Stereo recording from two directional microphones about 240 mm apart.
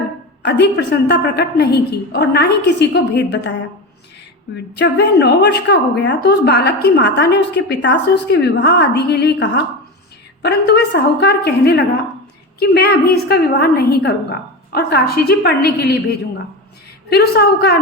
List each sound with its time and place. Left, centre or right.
0.4 s a woman's voice: left
4.7 s a woman's voice: left
17.1 s a woman's voice: left